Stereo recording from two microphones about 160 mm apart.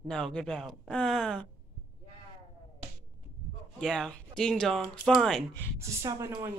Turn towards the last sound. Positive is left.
turn(degrees=-20)  # may be behind; listen again after turning